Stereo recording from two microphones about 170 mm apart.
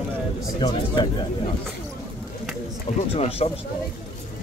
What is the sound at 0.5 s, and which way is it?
Speech, 25° left (ahead or behind).